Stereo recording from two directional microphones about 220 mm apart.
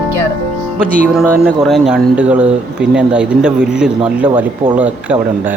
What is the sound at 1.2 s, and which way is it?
Speech, 10° right (ahead or behind).